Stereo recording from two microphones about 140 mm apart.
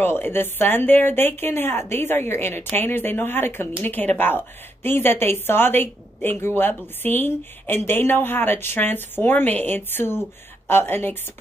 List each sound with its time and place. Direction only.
0.0 s a woman's voice: 15° left (ahead or behind)